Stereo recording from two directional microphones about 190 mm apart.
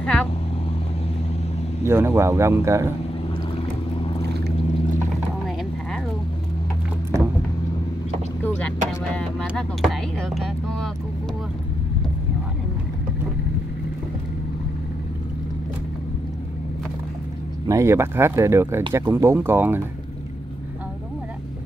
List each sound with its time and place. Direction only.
0.0 s vehicle: 5° left (ahead or behind)
1.9 s speech: 15° right (ahead or behind)
4.0 s vehicle: 25° left (ahead or behind)
8.4 s vehicle: 10° left (ahead or behind)
17.6 s speech: 15° right (ahead or behind)